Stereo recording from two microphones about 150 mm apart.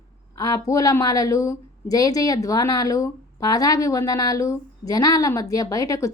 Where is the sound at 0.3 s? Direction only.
20° left (ahead or behind).